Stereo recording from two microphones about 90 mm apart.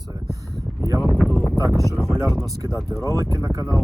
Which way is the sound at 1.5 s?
40° right (ahead or behind).